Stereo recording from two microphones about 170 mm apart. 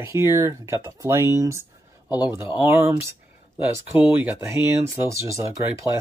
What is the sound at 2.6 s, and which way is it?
Speech, 15° right (ahead or behind).